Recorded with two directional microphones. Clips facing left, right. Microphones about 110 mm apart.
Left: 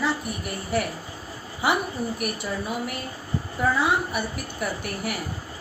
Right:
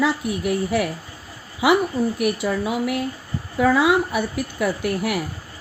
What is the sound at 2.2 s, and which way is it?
A woman's voice, 90° right.